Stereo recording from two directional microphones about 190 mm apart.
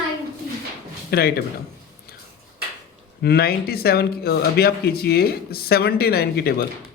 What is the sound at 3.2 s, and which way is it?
Speech, 55° left (ahead or behind).